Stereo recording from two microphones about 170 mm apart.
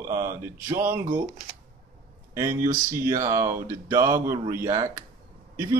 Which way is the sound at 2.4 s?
15° right (ahead or behind).